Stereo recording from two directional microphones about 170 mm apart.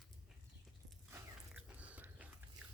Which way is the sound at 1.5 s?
10° right (ahead or behind).